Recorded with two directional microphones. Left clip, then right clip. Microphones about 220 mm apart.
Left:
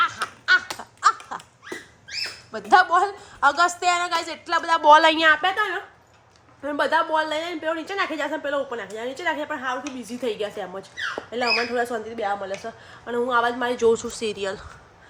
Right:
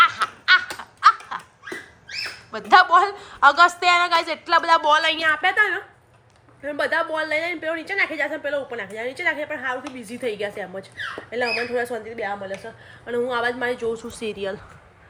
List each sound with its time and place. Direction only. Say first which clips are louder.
0.0 s a sound: right 6 dB; 15° left (ahead or behind)
0.8 s laughter: right 4 dB; 20° left (ahead or behind)
2.5 s a woman's voice: right 3 dB; 15° left (ahead or behind)
4.9 s a woman's voice: left 4 dB; 35° left (ahead or behind)
5.4 s a woman's voice: right 3 dB; 10° left (ahead or behind)